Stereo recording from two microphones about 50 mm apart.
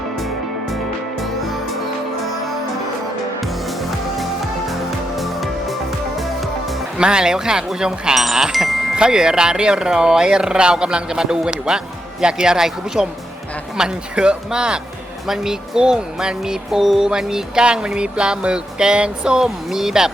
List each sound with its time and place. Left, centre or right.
3.4 s music: centre
7.0 s speech: centre
8.2 s wind chime: centre
9.0 s speech: centre